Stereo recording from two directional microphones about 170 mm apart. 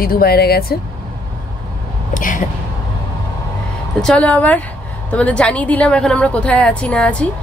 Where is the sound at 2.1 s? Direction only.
50° left (ahead or behind).